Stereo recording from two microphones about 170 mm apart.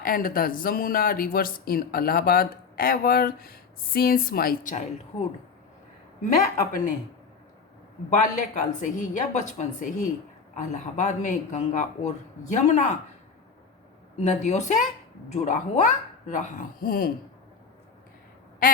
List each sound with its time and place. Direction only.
0.0 s speech: 55° left (ahead or behind)
8.2 s speech: 45° left (ahead or behind)
14.2 s speech: 40° left (ahead or behind); by 17.1 s 60° left (ahead or behind)
18.6 s quack: 55° left (ahead or behind)